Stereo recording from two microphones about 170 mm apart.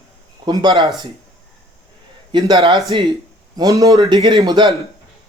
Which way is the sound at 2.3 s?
30° right (ahead or behind).